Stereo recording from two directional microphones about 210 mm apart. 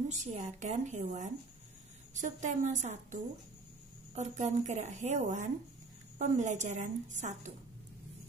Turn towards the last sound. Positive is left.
turn(degrees=-35)  # may be behind; listen again after turning